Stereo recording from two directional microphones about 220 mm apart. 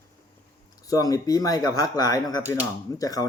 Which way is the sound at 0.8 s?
15° left (ahead or behind).